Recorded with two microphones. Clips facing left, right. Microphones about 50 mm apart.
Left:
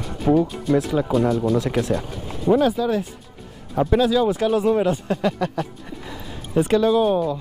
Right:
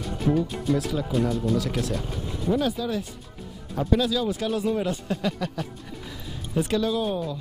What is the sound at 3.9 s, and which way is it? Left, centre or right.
Speech, left.